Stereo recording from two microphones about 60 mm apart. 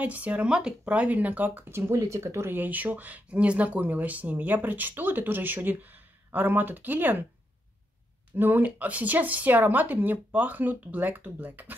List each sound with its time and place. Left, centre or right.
0.0 s speech: right
1.9 s speech: right
2.5 s speech: right
8.4 s speech: right